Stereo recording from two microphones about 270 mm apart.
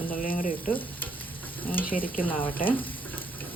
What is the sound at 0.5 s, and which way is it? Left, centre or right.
Stir, centre.